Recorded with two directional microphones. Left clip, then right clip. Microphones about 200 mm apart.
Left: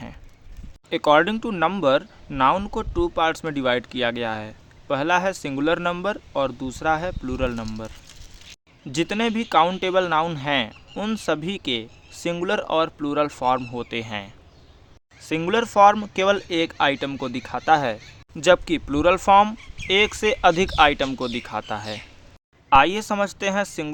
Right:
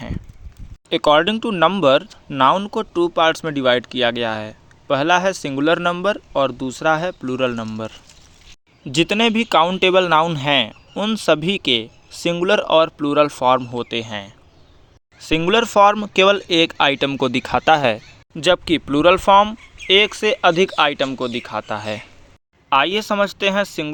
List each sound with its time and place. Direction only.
0.9 s speech: 20° right (ahead or behind); by 18.0 s 40° right (ahead or behind)
18.3 s speech: 20° right (ahead or behind)